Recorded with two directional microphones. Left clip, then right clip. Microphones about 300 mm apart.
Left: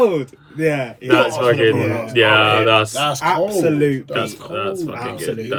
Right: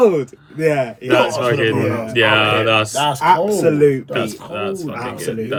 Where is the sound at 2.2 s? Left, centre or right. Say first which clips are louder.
Left 1 dB; centre.